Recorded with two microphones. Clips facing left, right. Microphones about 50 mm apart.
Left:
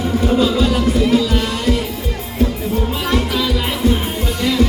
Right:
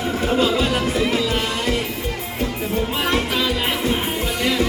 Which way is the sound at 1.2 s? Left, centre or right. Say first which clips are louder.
Left 3 dB; right.